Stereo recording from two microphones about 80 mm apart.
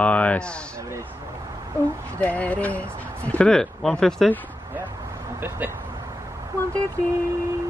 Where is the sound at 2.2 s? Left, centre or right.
Centre.